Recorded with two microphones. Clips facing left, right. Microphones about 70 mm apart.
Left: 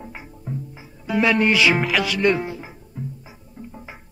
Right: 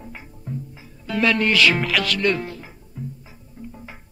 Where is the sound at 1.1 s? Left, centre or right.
Centre.